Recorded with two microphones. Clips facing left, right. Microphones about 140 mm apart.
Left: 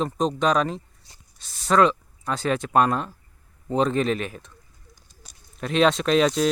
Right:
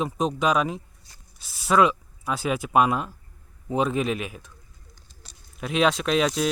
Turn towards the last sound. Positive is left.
turn(degrees=-5)  # may be behind; listen again after turning